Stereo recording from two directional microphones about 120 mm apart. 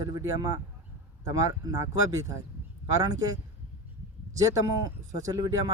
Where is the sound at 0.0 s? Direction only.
35° right (ahead or behind).